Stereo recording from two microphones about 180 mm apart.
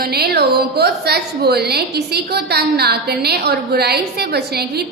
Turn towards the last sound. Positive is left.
turn(degrees=-65)  # may be behind; listen again after turning